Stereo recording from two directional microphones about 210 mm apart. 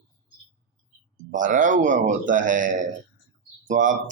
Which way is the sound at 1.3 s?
40° right (ahead or behind).